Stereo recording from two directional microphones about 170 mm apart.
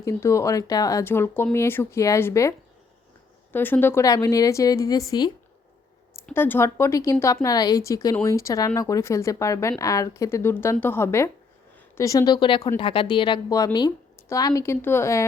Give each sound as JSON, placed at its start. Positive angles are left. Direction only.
{"t": 0.0, "sound": "a woman's voice", "side_deg": 15}
{"t": 6.3, "sound": "a woman's voice", "side_deg": 15}